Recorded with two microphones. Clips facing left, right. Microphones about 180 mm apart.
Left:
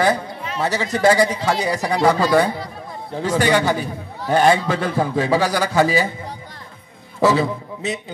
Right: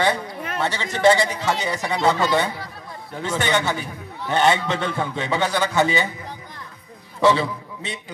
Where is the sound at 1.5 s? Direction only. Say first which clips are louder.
Left 4 dB; 30° left (ahead or behind).